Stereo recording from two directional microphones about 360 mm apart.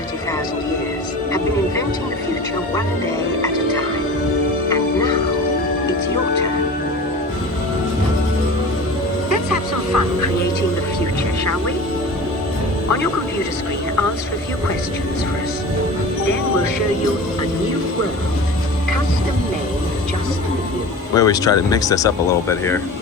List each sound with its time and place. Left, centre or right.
21.2 s speech: centre